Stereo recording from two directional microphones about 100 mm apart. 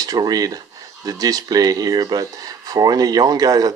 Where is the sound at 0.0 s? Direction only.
40° right (ahead or behind).